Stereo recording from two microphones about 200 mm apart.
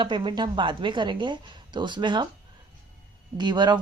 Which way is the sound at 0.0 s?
25° right (ahead or behind).